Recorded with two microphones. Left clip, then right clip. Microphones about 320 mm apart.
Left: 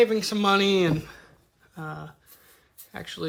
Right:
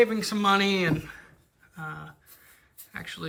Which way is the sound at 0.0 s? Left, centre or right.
Centre.